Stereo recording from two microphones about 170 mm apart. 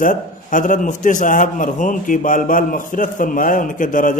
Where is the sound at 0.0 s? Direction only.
50° left (ahead or behind).